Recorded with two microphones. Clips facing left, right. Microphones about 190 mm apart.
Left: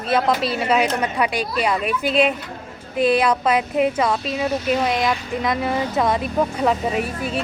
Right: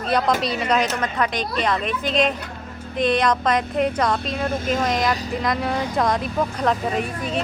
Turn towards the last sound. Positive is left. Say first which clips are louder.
# left 1 dB
turn(degrees=5)  # may be behind; listen again after turning